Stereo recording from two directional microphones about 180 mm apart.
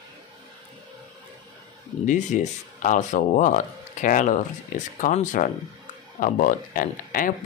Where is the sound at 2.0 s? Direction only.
45° left (ahead or behind).